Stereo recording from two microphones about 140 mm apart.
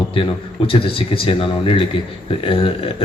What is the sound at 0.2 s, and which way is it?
A man's voice, 40° left (ahead or behind).